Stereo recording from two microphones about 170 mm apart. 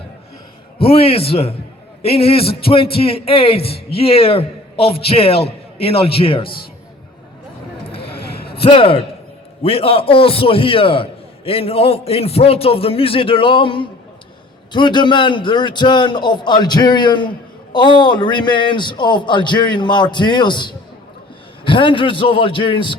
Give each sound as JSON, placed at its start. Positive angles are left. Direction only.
{"t": 0.8, "sound": "a man's voice", "side_deg": 35}
{"t": 8.1, "sound": "a sound", "side_deg": 70}
{"t": 8.6, "sound": "a man's voice", "side_deg": 30}